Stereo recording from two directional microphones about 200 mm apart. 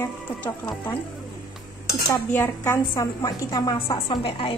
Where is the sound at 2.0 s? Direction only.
10° left (ahead or behind).